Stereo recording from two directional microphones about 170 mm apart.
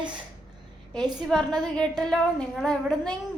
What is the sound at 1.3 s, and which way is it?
A woman's voice, 5° left (ahead or behind).